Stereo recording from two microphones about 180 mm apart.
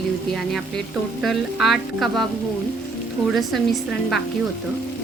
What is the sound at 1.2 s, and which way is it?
Speech, centre (ahead or behind).